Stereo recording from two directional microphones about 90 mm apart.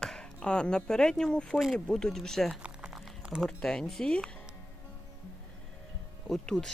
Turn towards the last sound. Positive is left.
turn(degrees=5)  # may be behind; listen again after turning